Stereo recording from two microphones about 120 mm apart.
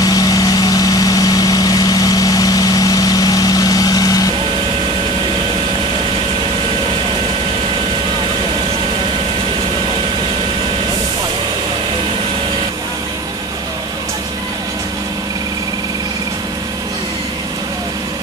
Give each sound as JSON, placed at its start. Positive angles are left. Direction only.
{"t": 0.0, "sound": "vehicle", "side_deg": 30}